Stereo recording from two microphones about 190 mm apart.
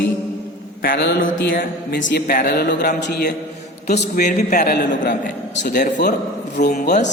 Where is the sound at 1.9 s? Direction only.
65° left (ahead or behind).